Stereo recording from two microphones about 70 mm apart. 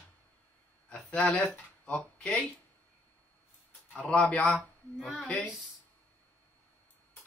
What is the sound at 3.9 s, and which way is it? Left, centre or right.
Speech, centre.